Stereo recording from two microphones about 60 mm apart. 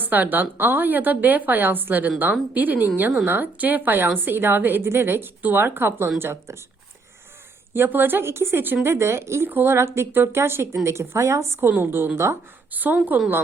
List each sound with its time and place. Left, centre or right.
0.0 s a woman's voice: right
7.7 s speech: right
9.5 s a woman's voice: right
9.7 s speech: right
11.7 s a woman's voice: right
12.7 s a woman's voice: right